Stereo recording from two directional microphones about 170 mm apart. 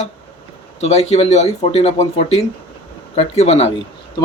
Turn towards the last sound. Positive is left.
turn(degrees=40)  # may be behind; listen again after turning